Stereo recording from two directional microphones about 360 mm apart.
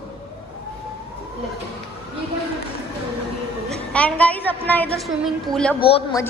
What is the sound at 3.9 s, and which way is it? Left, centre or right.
A woman's voice, centre.